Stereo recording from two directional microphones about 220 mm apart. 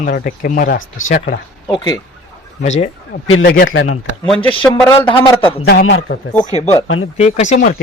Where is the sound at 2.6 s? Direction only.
30° left (ahead or behind).